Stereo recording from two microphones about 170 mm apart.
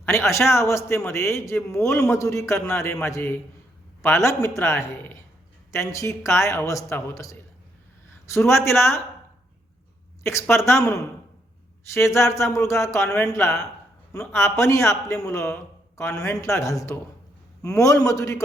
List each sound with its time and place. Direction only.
0.0 s a man's voice: 15° left (ahead or behind)
10.2 s a man's voice: 15° left (ahead or behind)
11.9 s a man's voice: 15° left (ahead or behind)